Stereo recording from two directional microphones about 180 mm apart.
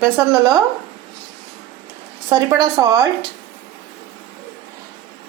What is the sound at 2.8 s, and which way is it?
Speech, 15° right (ahead or behind).